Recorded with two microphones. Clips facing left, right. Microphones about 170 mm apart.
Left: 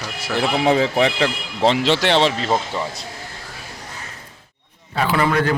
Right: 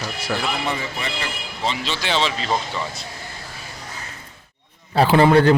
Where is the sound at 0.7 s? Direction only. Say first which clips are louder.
Left 10 dB; 85° left; by 2.4 s 55° left (ahead or behind).